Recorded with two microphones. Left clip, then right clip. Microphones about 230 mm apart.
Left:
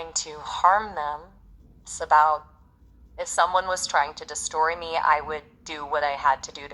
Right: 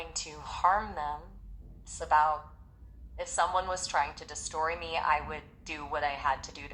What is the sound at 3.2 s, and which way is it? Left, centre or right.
Speech, left.